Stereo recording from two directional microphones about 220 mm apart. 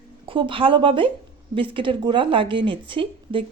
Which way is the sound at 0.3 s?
25° right (ahead or behind).